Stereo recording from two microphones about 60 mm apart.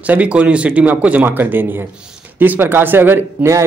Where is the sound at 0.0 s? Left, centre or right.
Right.